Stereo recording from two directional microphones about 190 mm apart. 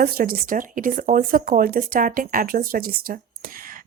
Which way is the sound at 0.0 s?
50° right (ahead or behind).